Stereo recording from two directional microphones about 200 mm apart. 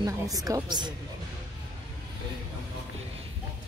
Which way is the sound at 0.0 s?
15° right (ahead or behind).